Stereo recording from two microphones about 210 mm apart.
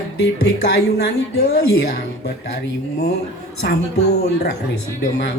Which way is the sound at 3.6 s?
50° left (ahead or behind).